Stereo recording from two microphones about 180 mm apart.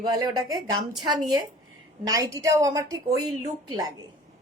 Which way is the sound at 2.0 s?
20° right (ahead or behind).